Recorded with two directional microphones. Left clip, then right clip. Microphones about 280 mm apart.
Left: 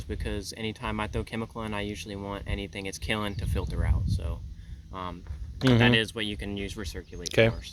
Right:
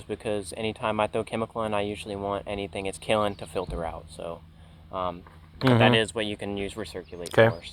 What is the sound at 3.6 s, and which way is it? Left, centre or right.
Speech, left.